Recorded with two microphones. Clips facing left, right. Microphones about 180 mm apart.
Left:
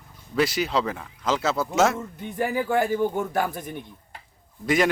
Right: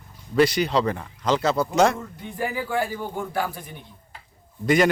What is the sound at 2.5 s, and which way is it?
Speech, 45° left (ahead or behind).